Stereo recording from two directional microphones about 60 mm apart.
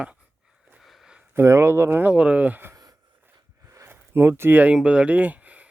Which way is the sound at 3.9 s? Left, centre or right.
Right.